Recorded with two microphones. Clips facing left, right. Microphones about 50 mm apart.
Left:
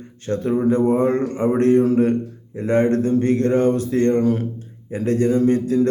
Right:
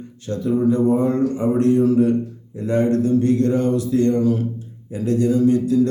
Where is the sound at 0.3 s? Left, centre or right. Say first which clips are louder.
Even; left.